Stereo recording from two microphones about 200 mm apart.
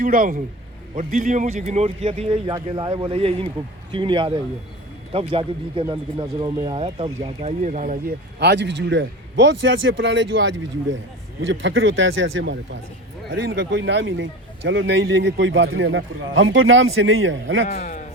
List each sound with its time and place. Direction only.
0.0 s speech: 45° right (ahead or behind)
8.4 s a man's voice: 60° right (ahead or behind)